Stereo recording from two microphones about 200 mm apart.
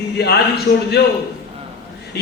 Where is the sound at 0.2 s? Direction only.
55° left (ahead or behind).